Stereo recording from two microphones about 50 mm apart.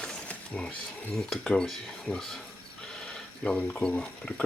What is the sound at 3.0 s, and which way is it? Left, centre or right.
Speech, centre.